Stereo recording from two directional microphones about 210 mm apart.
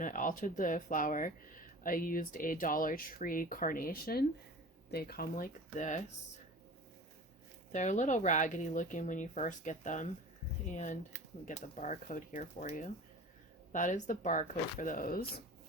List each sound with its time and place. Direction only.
0.0 s speech: 40° left (ahead or behind)
7.7 s speech: 35° left (ahead or behind)